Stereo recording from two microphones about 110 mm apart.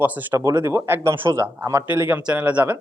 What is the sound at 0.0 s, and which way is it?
Speech, 15° right (ahead or behind).